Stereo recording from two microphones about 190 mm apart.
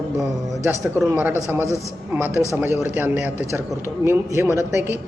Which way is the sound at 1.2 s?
10° right (ahead or behind).